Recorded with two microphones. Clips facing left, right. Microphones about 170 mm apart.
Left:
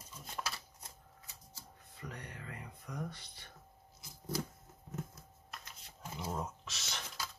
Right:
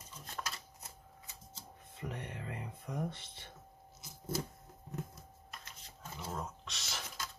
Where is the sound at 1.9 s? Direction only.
25° right (ahead or behind).